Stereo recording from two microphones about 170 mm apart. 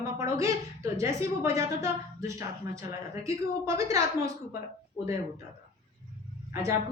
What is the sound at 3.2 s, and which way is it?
Speech, 15° right (ahead or behind).